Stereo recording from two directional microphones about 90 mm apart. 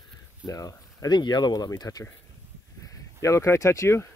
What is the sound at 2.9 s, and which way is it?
Speech, 35° left (ahead or behind).